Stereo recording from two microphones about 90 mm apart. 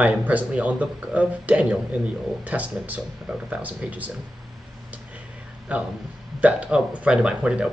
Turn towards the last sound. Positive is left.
turn(degrees=-10)  # may be behind; listen again after turning